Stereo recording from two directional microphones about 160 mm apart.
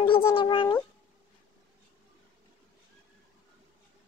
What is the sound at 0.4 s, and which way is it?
Speech, 30° left (ahead or behind).